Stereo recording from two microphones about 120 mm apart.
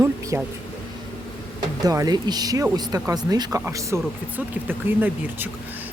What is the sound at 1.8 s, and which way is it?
Speech, 30° right (ahead or behind).